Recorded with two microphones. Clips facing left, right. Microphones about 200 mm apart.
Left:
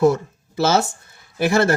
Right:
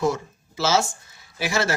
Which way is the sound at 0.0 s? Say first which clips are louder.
Left 7 dB; 60° left (ahead or behind).